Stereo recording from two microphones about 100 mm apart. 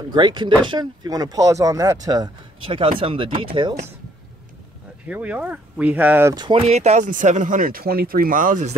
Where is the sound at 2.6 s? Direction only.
65° right (ahead or behind).